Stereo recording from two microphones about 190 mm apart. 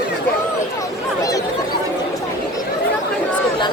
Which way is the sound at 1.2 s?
15° left (ahead or behind).